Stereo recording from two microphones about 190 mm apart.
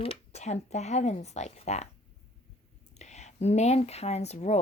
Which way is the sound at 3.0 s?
35° left (ahead or behind).